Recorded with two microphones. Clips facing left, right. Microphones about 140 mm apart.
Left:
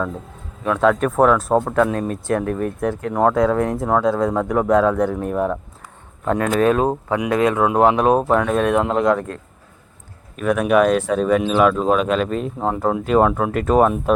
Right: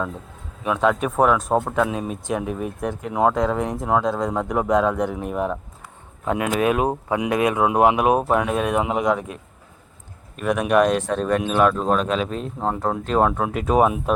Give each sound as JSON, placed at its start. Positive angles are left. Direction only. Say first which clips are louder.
{"t": 0.6, "sound": "speech", "louder": "left 3 dB", "side_deg": -5}